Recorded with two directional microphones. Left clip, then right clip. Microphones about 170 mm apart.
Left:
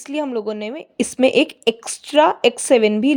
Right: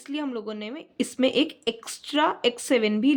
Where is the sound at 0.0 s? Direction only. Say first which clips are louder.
Left 9 dB; 40° left (ahead or behind).